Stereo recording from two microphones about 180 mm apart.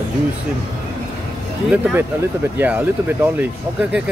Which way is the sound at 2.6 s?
10° right (ahead or behind).